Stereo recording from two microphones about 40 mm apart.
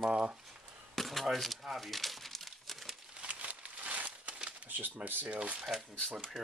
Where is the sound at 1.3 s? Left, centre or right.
Centre.